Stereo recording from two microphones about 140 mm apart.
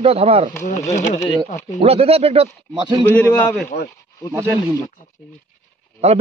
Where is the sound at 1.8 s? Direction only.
45° right (ahead or behind).